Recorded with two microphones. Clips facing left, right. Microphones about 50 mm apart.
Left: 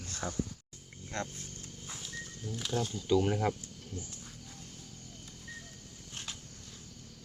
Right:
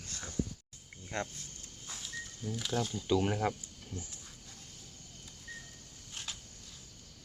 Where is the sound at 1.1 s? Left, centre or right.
Right.